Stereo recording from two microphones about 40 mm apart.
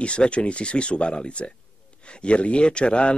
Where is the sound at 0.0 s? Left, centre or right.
Left.